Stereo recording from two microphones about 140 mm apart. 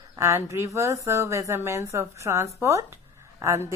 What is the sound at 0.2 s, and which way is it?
A woman's voice, 20° right (ahead or behind).